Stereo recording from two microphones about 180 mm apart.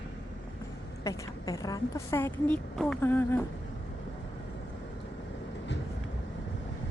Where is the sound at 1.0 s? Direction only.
20° left (ahead or behind).